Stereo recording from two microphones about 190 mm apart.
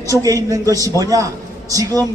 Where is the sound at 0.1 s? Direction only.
15° right (ahead or behind).